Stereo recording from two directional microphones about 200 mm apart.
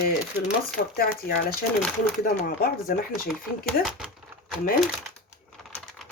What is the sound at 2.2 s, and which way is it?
Speech, 45° left (ahead or behind).